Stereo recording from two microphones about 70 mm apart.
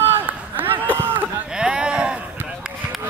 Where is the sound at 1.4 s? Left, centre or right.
Centre.